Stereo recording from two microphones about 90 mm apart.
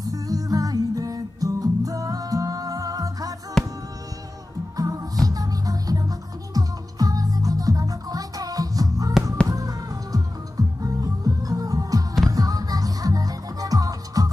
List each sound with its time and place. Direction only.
0.0 s music: 40° right (ahead or behind)
3.6 s music: 5° left (ahead or behind)
4.7 s music: 45° right (ahead or behind)